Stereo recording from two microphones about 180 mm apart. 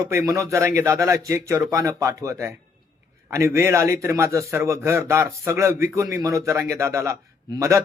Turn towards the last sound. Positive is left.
turn(degrees=-15)  # may be behind; listen again after turning